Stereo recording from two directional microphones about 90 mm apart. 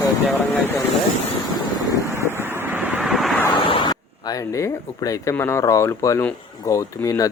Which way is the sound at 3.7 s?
75° left (ahead or behind).